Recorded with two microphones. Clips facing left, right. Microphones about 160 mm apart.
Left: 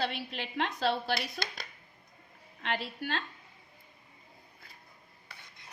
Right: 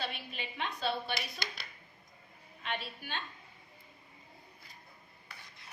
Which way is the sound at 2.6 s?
90° left.